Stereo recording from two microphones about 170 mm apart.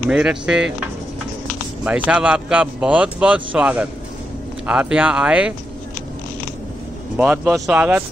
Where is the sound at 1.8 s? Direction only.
10° right (ahead or behind).